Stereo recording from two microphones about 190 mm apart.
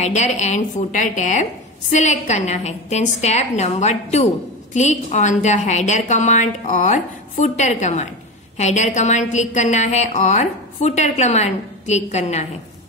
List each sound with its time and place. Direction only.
0.0 s a woman's voice: 35° left (ahead or behind)